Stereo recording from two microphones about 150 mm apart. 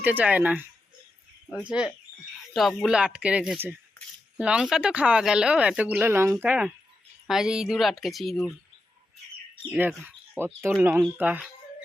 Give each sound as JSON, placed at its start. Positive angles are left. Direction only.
{"t": 0.0, "sound": "speech", "side_deg": -10}
{"t": 2.5, "sound": "speech", "side_deg": 0}
{"t": 9.7, "sound": "speech", "side_deg": -10}